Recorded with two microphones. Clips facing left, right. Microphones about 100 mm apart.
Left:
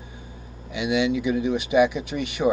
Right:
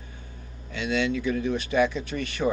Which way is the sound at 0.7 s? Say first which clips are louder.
Left 4 dB; 15° left (ahead or behind).